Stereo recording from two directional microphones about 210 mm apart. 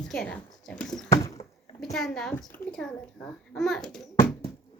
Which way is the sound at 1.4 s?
30° left (ahead or behind).